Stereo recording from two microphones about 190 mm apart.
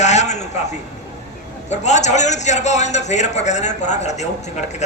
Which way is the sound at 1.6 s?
35° left (ahead or behind).